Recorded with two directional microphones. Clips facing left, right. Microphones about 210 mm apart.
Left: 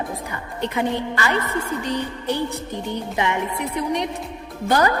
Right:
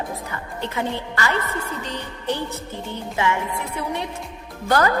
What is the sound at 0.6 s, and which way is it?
A woman's voice, 15° left (ahead or behind).